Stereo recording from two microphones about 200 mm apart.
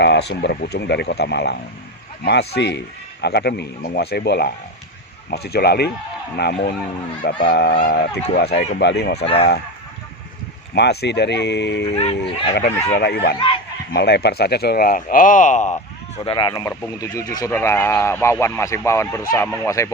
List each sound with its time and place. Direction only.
0.0 s a man's voice: 60° left (ahead or behind)
9.1 s speech: 30° left (ahead or behind)
10.8 s a man's voice: 55° left (ahead or behind)
11.9 s speech: 30° left (ahead or behind)
12.2 s a man's voice: 55° left (ahead or behind); by 19.9 s 15° left (ahead or behind)